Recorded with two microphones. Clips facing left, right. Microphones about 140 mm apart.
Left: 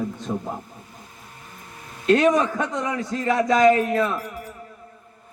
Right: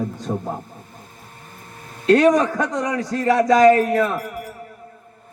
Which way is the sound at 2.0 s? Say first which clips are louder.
Right 3 dB; 45° right (ahead or behind).